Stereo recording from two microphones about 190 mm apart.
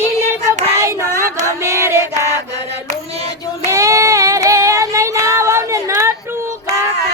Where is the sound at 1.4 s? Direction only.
15° right (ahead or behind).